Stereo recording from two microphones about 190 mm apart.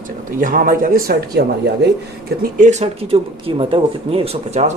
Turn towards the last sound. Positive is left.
turn(degrees=-35)  # may be behind; listen again after turning